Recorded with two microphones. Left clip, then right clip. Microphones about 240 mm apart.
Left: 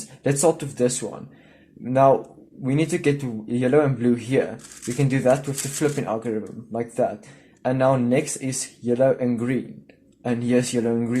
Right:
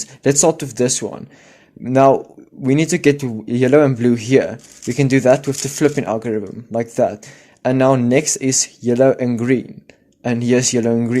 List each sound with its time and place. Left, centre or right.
0.2 s speech: right